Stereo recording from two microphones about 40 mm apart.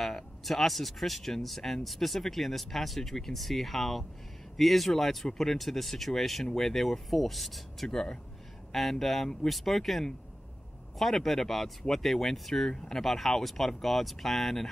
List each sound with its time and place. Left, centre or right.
0.0 s speech: centre
7.9 s speech: centre
9.0 s speech: centre